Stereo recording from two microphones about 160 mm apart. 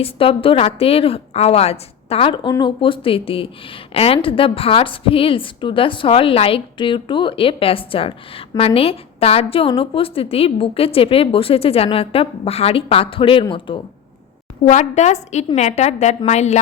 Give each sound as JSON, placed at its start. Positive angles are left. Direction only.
{"t": 0.0, "sound": "a woman's voice", "side_deg": 35}
{"t": 14.6, "sound": "a woman's voice", "side_deg": 50}